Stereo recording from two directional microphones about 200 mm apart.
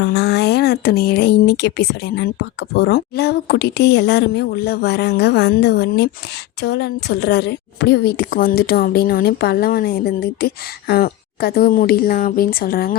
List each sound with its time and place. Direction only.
0.0 s a woman's voice: 55° left (ahead or behind)